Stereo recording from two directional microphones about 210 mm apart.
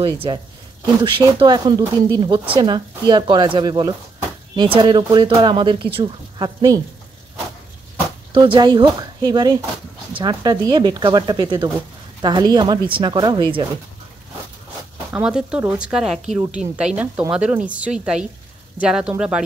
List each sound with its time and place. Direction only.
1.0 s speech: 25° right (ahead or behind)
8.3 s speech: 20° right (ahead or behind)
15.1 s speech: 5° right (ahead or behind)